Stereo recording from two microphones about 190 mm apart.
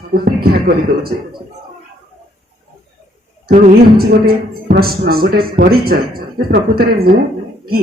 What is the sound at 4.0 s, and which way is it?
A man's voice, 55° right (ahead or behind).